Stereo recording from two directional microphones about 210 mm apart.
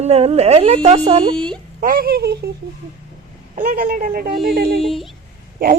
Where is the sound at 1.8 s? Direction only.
40° right (ahead or behind).